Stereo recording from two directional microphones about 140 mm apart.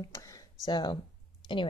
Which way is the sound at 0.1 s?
25° left (ahead or behind).